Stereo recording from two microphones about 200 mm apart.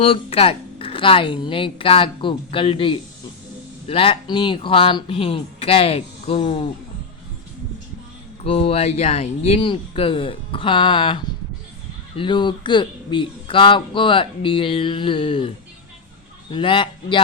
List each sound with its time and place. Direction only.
0.0 s speech: 30° left (ahead or behind)
8.4 s speech: 30° left (ahead or behind)
16.5 s speech: 25° left (ahead or behind)